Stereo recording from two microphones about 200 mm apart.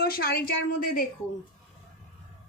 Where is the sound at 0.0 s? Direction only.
50° left (ahead or behind).